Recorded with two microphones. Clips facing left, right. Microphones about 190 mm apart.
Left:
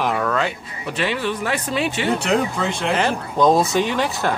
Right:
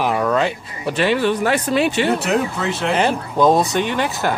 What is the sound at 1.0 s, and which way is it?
Speech, 60° right (ahead or behind).